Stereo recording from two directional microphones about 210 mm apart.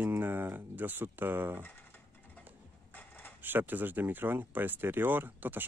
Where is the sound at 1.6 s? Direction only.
10° left (ahead or behind).